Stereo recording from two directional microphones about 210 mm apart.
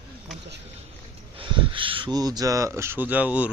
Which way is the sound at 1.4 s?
25° right (ahead or behind).